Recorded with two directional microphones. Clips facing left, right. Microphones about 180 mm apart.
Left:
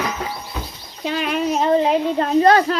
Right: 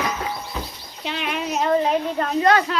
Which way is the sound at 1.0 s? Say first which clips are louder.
Left 6 dB; 40° left (ahead or behind).